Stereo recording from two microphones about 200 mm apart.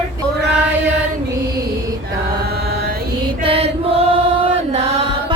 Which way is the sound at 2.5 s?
50° right (ahead or behind).